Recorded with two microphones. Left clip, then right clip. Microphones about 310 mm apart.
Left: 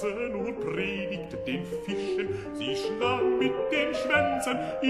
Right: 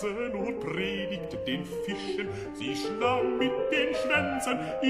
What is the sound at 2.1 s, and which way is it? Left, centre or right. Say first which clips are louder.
Music: left 3 dB; centre.